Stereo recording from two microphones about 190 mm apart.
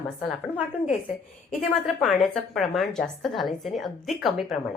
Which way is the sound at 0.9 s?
35° left (ahead or behind).